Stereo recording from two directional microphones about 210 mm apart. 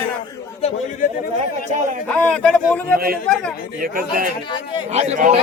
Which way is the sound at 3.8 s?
40° right (ahead or behind).